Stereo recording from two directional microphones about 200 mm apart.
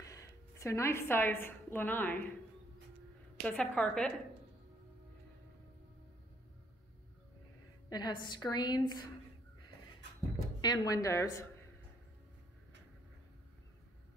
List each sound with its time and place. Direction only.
0.0 s a woman's voice: 15° left (ahead or behind)
3.4 s a woman's voice: 5° left (ahead or behind)
7.9 s a woman's voice: 20° left (ahead or behind)
10.6 s a woman's voice: 20° left (ahead or behind)